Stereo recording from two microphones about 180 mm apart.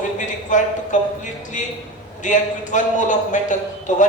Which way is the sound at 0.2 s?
45° left (ahead or behind).